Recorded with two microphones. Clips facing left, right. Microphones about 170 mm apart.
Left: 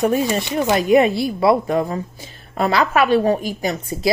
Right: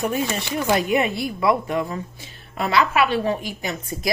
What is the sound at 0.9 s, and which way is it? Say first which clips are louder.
A woman's voice: left 7 dB; 35° left (ahead or behind).